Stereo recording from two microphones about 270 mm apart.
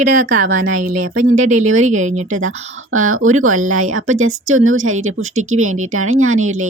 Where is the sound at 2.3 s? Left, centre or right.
Right.